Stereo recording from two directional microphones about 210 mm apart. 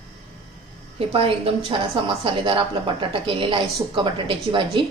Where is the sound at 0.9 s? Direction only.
25° right (ahead or behind).